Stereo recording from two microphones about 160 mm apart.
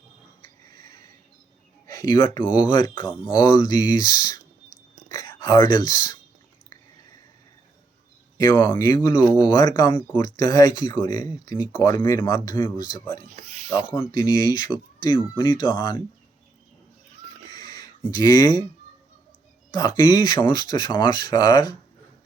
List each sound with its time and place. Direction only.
1.9 s speech: 25° left (ahead or behind)
8.4 s speech: 30° left (ahead or behind)
8.7 s speech: 20° left (ahead or behind)
13.1 s speech: 45° right (ahead or behind)
14.1 s speech: 25° left (ahead or behind)
17.5 s owl: 25° left (ahead or behind)
18.1 s speech: 25° left (ahead or behind)
19.7 s speech: 20° left (ahead or behind)